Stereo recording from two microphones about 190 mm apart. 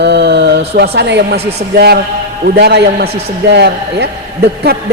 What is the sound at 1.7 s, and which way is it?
A woman's voice, 55° right (ahead or behind).